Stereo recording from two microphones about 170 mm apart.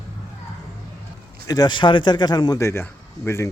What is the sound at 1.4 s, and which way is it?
Speech, 20° left (ahead or behind).